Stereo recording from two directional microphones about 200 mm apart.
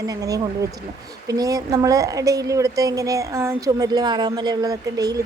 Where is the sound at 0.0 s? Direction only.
15° right (ahead or behind).